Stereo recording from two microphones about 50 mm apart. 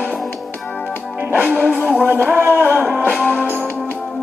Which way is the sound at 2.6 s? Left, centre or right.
Right.